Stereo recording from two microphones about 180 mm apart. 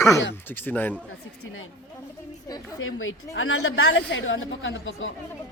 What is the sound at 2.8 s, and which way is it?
A woman's voice, 90° left.